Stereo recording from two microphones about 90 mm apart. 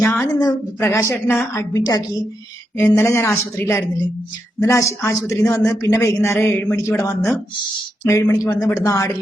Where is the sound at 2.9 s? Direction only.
25° left (ahead or behind).